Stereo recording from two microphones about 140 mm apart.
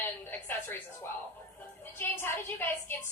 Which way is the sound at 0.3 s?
15° left (ahead or behind).